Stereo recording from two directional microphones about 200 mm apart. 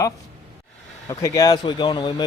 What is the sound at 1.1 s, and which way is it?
Speech, 15° left (ahead or behind).